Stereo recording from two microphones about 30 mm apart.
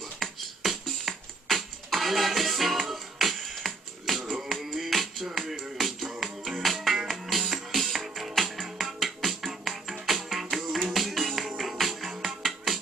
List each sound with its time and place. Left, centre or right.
0.2 s music: centre
0.6 s music: centre
12.3 s music: centre